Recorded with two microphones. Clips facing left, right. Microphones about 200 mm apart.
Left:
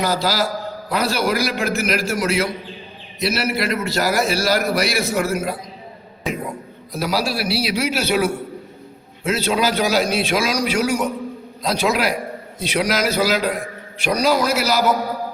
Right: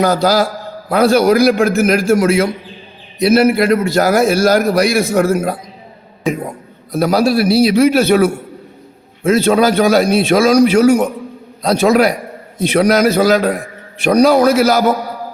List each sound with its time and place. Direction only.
0.0 s a man's voice: 50° right (ahead or behind)
6.9 s a man's voice: 50° right (ahead or behind)
9.2 s a man's voice: 50° right (ahead or behind)